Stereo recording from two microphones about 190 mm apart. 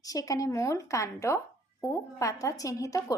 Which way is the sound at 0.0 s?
20° left (ahead or behind).